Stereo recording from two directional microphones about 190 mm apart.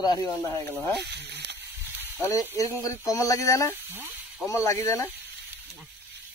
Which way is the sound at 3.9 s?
10° right (ahead or behind).